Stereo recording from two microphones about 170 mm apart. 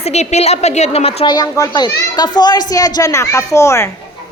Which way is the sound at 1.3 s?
20° left (ahead or behind).